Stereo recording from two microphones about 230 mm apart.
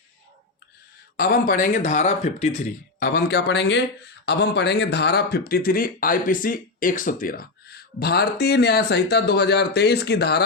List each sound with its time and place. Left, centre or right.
1.1 s speech: left
3.0 s speech: left